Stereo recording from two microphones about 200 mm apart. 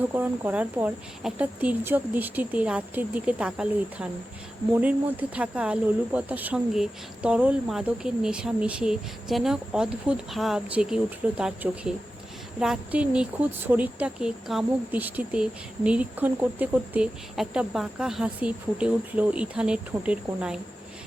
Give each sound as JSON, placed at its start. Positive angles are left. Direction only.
{"t": 0.1, "sound": "speech", "side_deg": -10}